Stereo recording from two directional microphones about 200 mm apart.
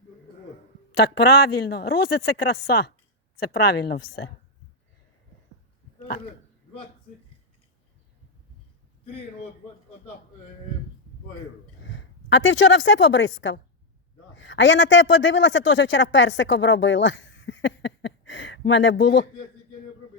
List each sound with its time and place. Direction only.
0.9 s a woman's voice: 55° left (ahead or behind)
11.8 s a woman's voice: 65° left (ahead or behind)